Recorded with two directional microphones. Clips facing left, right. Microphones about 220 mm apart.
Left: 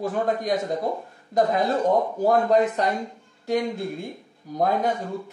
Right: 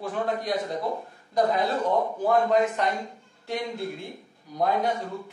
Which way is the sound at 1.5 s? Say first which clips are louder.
Left 3 dB; 40° left (ahead or behind).